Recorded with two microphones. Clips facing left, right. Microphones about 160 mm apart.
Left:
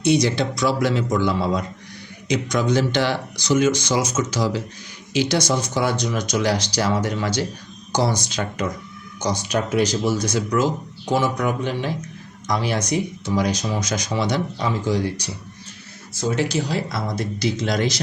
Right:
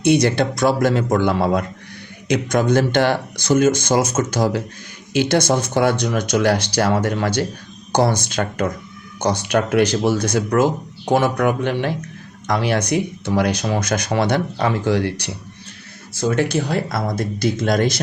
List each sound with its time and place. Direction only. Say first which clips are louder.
0.0 s speech: right 3 dB; 55° right (ahead or behind)
16.2 s speech: right 3 dB; 55° right (ahead or behind)